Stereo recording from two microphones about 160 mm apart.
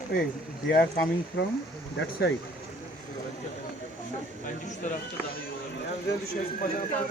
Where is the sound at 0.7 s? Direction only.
75° left (ahead or behind).